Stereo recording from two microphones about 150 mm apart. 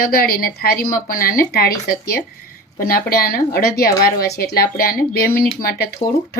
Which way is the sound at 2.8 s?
80° left.